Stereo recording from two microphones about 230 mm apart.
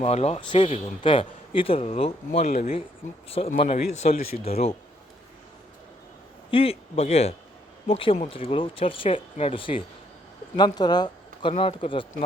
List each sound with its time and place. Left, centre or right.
0.0 s speech: left
6.5 s speech: left